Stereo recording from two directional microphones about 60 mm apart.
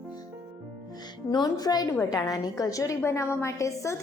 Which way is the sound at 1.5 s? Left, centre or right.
Left.